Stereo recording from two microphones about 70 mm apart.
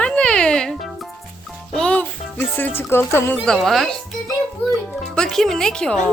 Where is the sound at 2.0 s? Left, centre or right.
Left.